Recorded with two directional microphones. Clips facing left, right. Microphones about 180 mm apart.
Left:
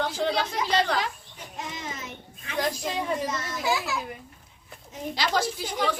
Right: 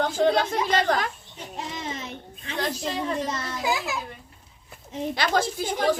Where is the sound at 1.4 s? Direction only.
30° right (ahead or behind).